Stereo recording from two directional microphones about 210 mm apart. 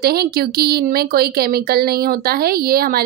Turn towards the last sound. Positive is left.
turn(degrees=-45)  # may be behind; listen again after turning